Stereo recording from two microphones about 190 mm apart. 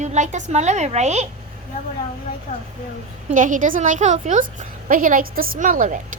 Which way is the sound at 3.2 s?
45° right (ahead or behind).